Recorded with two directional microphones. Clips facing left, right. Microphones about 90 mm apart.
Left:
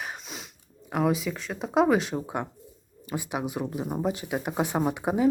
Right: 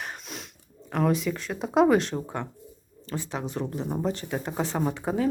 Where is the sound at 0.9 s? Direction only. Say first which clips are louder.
Right 1 dB; 5° left (ahead or behind).